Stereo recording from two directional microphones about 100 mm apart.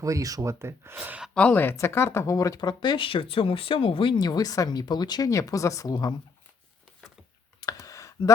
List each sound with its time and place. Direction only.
0.0 s speech: 35° right (ahead or behind); by 1.2 s 15° right (ahead or behind)
1.3 s speech: 15° left (ahead or behind)
1.7 s speech: 25° left (ahead or behind); by 4.1 s 65° left (ahead or behind)
4.2 s speech: 40° left (ahead or behind)
7.6 s a sound: 35° left (ahead or behind)